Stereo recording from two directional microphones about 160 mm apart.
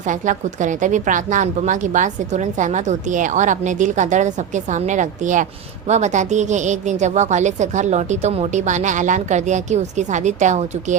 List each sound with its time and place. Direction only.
0.0 s a woman's voice: 50° right (ahead or behind)